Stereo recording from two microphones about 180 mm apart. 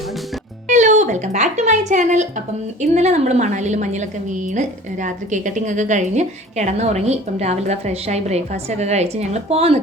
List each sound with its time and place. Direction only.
0.7 s a woman's voice: 40° right (ahead or behind)